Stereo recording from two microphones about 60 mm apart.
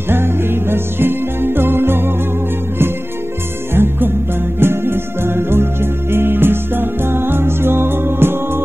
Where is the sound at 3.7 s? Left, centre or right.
Right.